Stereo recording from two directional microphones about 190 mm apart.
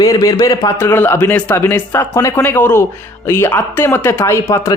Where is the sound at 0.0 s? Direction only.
20° left (ahead or behind).